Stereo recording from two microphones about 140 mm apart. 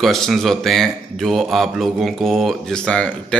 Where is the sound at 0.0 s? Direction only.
Centre (ahead or behind).